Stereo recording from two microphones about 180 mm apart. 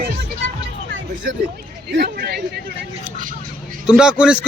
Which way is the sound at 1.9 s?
60° right (ahead or behind).